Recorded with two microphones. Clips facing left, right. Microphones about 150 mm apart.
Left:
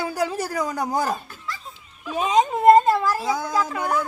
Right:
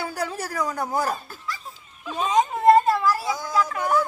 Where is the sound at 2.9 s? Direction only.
20° left (ahead or behind).